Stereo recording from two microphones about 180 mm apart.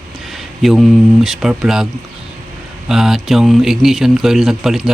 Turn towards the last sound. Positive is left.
turn(degrees=0)  # may be behind; listen again after turning